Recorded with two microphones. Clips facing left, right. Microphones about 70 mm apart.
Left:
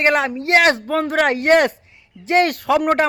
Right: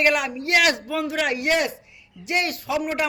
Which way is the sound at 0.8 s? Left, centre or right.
Left.